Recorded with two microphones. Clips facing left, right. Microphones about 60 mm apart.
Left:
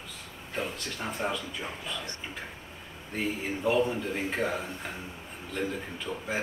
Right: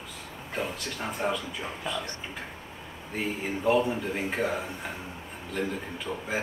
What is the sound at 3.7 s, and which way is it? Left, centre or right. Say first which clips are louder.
Speech: even; centre.